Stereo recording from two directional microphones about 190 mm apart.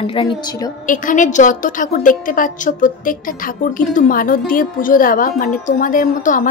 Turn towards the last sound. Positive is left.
turn(degrees=45)  # may be behind; listen again after turning